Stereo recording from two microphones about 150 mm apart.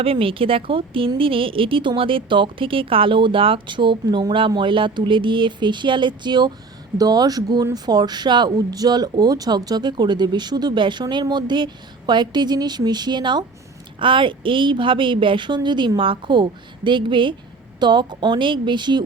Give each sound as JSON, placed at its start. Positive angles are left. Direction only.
{"t": 0.0, "sound": "a woman's voice", "side_deg": -40}